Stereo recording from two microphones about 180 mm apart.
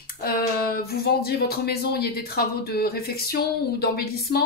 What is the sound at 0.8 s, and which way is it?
Speech, 60° left (ahead or behind).